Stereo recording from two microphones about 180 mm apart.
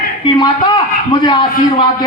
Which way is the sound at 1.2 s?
25° left (ahead or behind).